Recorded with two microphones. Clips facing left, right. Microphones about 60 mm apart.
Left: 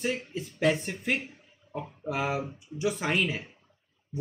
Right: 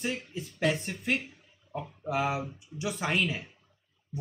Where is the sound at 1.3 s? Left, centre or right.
Left.